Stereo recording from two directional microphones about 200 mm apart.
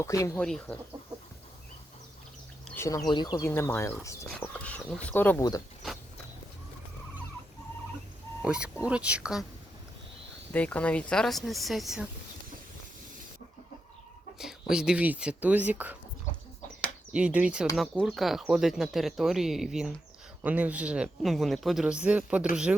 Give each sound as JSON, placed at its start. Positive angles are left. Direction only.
{"t": 0.0, "sound": "speech", "side_deg": 15}
{"t": 0.3, "sound": "speech", "side_deg": 5}
{"t": 2.6, "sound": "a sound", "side_deg": 15}
{"t": 3.1, "sound": "speech", "side_deg": 20}
{"t": 8.4, "sound": "speech", "side_deg": -5}
{"t": 10.5, "sound": "speech", "side_deg": 5}
{"t": 14.3, "sound": "speech", "side_deg": -5}
{"t": 17.1, "sound": "speech", "side_deg": -5}